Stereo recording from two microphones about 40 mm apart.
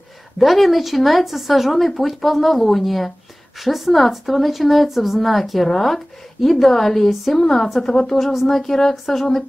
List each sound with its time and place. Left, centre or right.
0.4 s speech: centre